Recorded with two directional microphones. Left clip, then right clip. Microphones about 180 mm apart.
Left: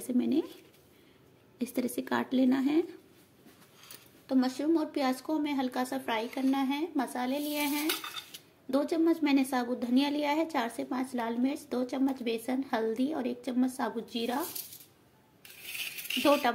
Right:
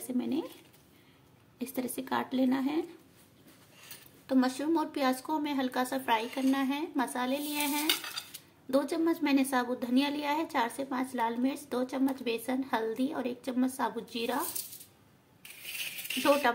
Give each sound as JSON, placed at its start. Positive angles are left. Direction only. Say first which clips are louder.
{"t": 0.0, "sound": "a sound", "louder": "left 4 dB", "side_deg": 20}
{"t": 1.6, "sound": "a woman's voice", "louder": "left 3 dB", "side_deg": 20}
{"t": 4.3, "sound": "a woman's voice", "louder": "even", "side_deg": 0}
{"t": 16.2, "sound": "speech", "louder": "even", "side_deg": 0}